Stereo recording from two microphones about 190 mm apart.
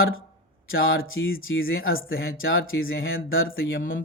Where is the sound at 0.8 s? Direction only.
90° left.